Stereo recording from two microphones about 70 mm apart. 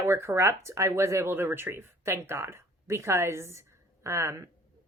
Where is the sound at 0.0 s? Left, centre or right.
Right.